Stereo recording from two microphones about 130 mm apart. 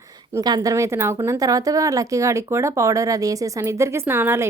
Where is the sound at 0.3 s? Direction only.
30° right (ahead or behind).